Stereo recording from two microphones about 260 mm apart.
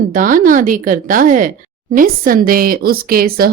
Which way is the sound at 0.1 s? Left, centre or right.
Right.